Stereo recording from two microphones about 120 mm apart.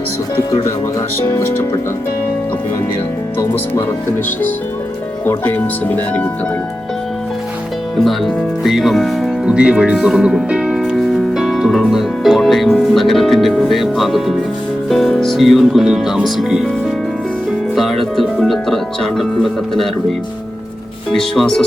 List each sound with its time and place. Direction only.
1.2 s speech: 20° left (ahead or behind)
5.2 s speech: 15° left (ahead or behind)
7.9 s speech: centre (ahead or behind)
9.5 s music: 10° right (ahead or behind)
11.9 s speech: centre (ahead or behind)
17.7 s music: centre (ahead or behind)
21.1 s speech: 5° left (ahead or behind)